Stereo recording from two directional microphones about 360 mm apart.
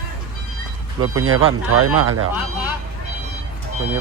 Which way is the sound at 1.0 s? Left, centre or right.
Right.